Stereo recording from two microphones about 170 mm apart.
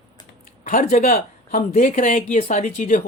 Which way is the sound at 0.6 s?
50° left (ahead or behind).